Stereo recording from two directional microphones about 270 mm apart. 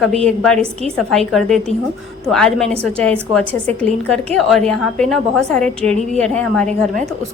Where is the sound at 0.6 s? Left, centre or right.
Right.